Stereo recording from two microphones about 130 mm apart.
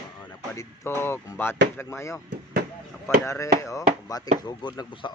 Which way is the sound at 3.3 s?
20° left (ahead or behind).